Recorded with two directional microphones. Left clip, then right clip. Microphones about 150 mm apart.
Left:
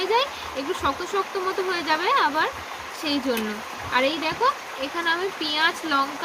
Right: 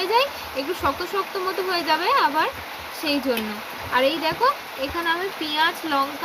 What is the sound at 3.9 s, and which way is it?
Speech, 15° left (ahead or behind).